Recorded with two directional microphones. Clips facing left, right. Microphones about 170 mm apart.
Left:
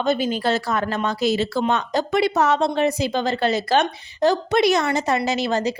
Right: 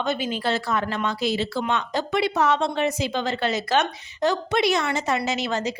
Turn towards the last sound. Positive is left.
turn(degrees=35)  # may be behind; listen again after turning